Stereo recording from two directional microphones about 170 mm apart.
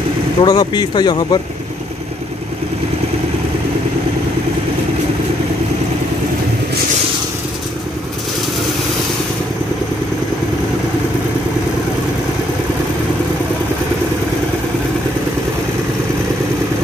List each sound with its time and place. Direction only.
0.4 s speech: 25° left (ahead or behind)